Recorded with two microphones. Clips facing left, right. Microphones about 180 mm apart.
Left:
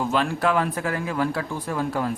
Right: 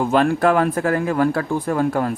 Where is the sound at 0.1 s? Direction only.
50° right (ahead or behind).